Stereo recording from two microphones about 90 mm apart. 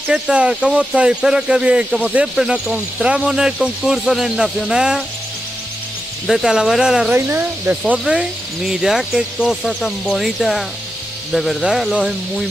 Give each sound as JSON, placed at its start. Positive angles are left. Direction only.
{"t": 0.1, "sound": "speech", "side_deg": -10}
{"t": 6.2, "sound": "speech", "side_deg": -5}
{"t": 7.1, "sound": "speech", "side_deg": -25}
{"t": 8.0, "sound": "speech", "side_deg": -5}